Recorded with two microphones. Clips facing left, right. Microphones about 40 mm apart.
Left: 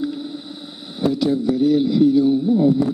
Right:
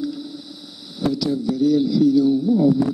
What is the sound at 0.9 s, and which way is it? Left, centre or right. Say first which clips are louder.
A man's voice: left 3 dB; left.